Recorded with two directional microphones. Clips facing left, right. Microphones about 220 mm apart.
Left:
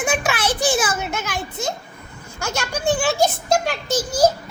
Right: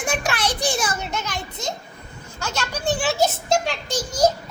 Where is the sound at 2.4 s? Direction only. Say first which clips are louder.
Left 3 dB; 10° left (ahead or behind).